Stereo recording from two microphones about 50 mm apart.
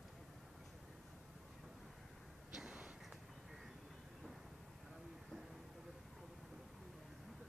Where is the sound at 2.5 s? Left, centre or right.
Centre.